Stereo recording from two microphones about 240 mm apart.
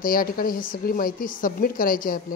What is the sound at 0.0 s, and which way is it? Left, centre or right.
Speech, left.